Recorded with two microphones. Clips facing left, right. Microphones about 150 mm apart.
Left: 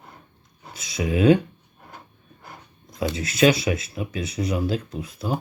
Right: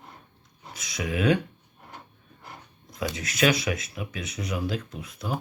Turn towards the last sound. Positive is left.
turn(degrees=30)  # may be behind; listen again after turning